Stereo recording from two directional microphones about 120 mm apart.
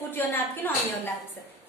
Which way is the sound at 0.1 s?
15° left (ahead or behind).